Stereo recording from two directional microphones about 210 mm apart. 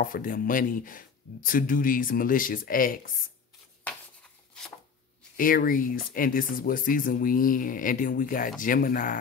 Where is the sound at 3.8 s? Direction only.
5° left (ahead or behind).